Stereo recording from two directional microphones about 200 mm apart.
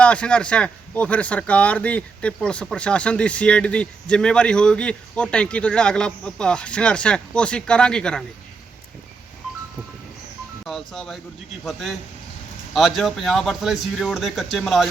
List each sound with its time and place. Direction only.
0.0 s speech: 5° left (ahead or behind)
10.7 s speech: centre (ahead or behind)